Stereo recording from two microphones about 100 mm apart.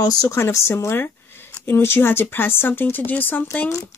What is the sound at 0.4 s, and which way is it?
Speech, 25° left (ahead or behind).